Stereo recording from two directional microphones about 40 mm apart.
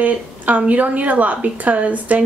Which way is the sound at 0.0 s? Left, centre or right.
Right.